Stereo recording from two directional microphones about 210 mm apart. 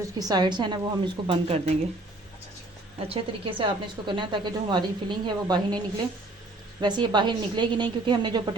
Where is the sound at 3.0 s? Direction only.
25° right (ahead or behind).